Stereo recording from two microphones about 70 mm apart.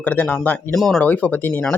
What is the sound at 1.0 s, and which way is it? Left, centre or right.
Speech, left.